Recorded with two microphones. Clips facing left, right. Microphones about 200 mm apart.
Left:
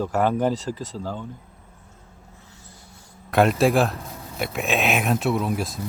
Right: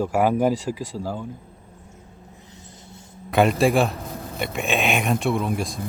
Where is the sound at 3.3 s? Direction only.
Centre (ahead or behind).